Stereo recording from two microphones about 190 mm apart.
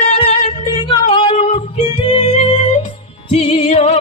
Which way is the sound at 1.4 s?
35° left (ahead or behind).